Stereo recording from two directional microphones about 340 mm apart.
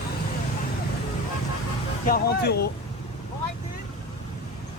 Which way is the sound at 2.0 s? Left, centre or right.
Left.